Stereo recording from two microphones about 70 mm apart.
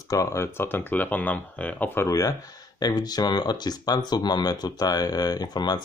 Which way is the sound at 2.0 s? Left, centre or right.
Left.